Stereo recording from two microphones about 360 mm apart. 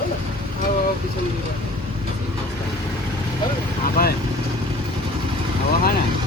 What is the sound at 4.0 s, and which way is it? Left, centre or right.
Speech, left.